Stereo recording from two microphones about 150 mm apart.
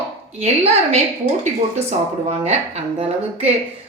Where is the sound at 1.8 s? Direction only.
45° right (ahead or behind).